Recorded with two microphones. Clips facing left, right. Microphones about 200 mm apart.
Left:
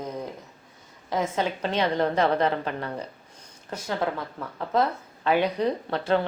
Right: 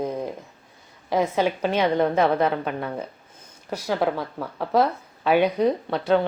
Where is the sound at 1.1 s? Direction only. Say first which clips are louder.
Right 5 dB; 10° right (ahead or behind).